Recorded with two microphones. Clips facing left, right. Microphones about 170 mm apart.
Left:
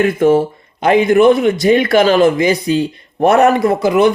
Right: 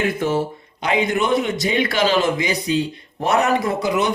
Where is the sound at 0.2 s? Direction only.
55° left (ahead or behind).